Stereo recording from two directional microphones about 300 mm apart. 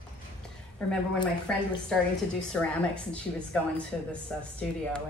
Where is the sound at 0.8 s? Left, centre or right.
Centre.